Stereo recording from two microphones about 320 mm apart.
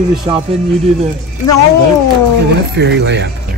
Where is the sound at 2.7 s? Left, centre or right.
Right.